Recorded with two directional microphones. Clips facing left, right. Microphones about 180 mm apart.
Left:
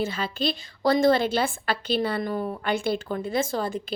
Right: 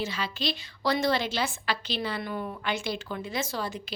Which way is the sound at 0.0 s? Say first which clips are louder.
Left 5 dB; 50° left (ahead or behind).